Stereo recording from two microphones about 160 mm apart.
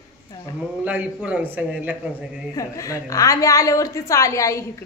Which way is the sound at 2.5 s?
20° left (ahead or behind).